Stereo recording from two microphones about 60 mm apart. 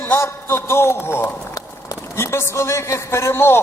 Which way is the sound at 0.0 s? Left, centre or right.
Left.